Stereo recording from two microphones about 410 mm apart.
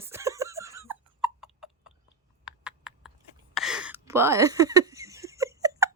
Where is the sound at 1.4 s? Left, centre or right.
Centre.